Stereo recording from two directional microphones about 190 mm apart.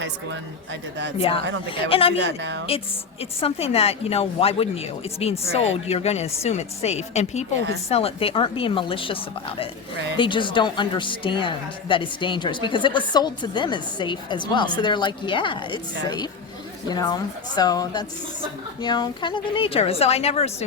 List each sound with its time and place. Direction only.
0.0 s speech: 70° right (ahead or behind)
1.6 s a woman's voice: 30° left (ahead or behind)
2.2 s speech: 70° right (ahead or behind)
2.6 s a woman's voice: 30° left (ahead or behind)